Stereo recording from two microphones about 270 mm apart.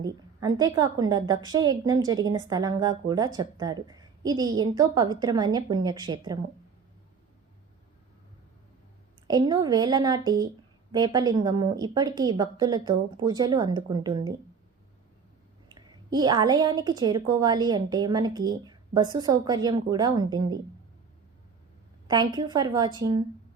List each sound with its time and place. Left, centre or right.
0.0 s a woman's voice: centre
9.2 s a woman's voice: centre
15.7 s a woman's voice: centre
22.0 s a woman's voice: centre